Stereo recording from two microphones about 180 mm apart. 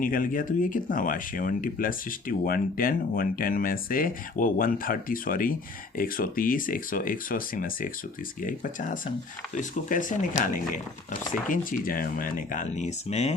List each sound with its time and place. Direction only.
0.0 s speech: 50° left (ahead or behind)